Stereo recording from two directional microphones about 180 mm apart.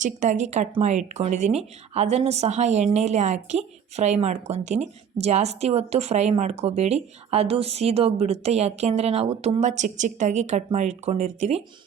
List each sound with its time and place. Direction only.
0.0 s speech: 45° right (ahead or behind)